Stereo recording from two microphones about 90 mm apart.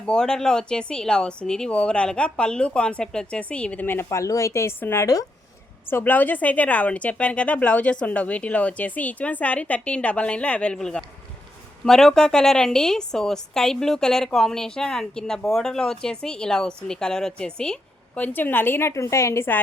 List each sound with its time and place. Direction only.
0.0 s a woman's voice: 10° left (ahead or behind); by 19.5 s 30° left (ahead or behind)